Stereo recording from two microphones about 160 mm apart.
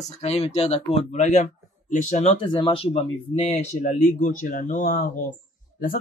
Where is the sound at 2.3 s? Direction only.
30° left (ahead or behind).